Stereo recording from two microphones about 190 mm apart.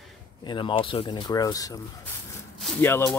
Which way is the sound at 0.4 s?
25° left (ahead or behind).